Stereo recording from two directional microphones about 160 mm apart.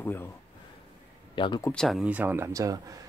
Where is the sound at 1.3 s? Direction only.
30° left (ahead or behind).